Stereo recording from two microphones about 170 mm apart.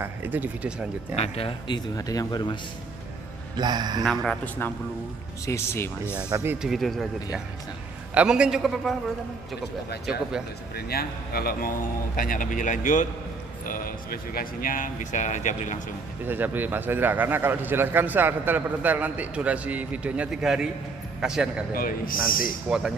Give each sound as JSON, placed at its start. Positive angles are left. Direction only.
{"t": 0.0, "sound": "a man's voice", "side_deg": -10}
{"t": 1.1, "sound": "speech", "side_deg": 40}
{"t": 2.0, "sound": "speech", "side_deg": 20}
{"t": 3.5, "sound": "speech", "side_deg": -25}
{"t": 4.0, "sound": "a man's voice", "side_deg": 0}
{"t": 5.4, "sound": "speech", "side_deg": 15}
{"t": 6.3, "sound": "a man's voice", "side_deg": -10}
{"t": 6.7, "sound": "a man's voice", "side_deg": 0}
{"t": 8.1, "sound": "a man's voice", "side_deg": -5}
{"t": 10.9, "sound": "a man's voice", "side_deg": 65}
{"t": 13.7, "sound": "speech", "side_deg": 60}
{"t": 16.3, "sound": "a man's voice", "side_deg": -10}
{"t": 21.7, "sound": "a man's voice", "side_deg": 55}
{"t": 22.7, "sound": "a man's voice", "side_deg": -5}